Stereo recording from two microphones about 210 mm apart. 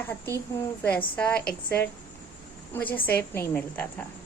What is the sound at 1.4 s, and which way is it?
Speech, 50° left (ahead or behind).